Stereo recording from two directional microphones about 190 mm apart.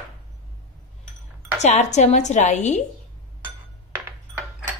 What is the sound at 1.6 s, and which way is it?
A woman's voice, 40° left (ahead or behind).